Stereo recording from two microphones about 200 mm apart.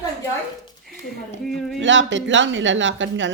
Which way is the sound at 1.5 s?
Centre (ahead or behind).